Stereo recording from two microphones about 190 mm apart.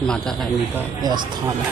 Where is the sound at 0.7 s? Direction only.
20° right (ahead or behind).